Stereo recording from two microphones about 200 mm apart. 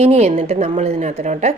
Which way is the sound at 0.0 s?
30° right (ahead or behind).